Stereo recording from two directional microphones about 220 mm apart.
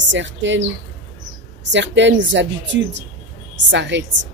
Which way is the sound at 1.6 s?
55° right (ahead or behind).